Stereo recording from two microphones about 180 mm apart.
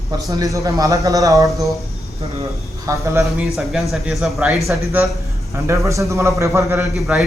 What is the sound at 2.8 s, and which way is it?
Speech, 15° right (ahead or behind).